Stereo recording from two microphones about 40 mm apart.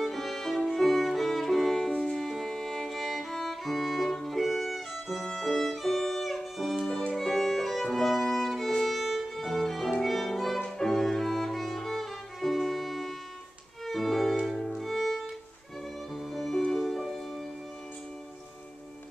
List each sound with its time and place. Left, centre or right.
0.0 s music: centre
5.2 s violin: centre
6.9 s music: centre
7.2 s violin: centre
9.9 s music: centre
16.3 s music: centre